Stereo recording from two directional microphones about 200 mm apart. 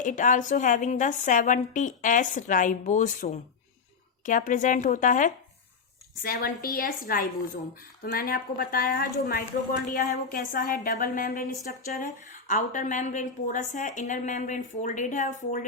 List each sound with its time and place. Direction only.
0.0 s a woman's voice: 40° left (ahead or behind)